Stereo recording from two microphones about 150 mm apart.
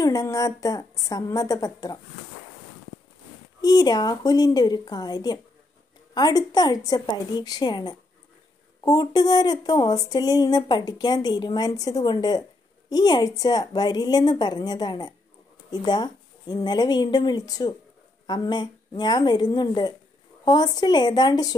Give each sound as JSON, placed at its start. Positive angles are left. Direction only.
{"t": 0.0, "sound": "speech", "side_deg": 20}
{"t": 3.6, "sound": "speech", "side_deg": 25}